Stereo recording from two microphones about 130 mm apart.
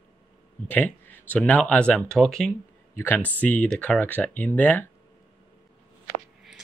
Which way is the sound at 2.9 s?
15° left (ahead or behind).